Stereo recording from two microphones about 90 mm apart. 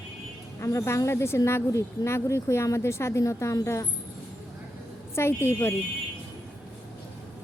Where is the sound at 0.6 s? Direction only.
35° left (ahead or behind).